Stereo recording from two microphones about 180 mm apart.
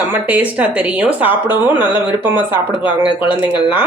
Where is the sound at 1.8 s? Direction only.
25° left (ahead or behind).